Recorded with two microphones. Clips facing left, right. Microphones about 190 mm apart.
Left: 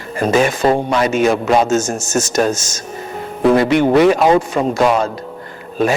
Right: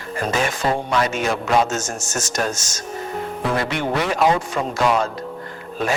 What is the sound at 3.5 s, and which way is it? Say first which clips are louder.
Speech: left 11 dB; 10° left (ahead or behind).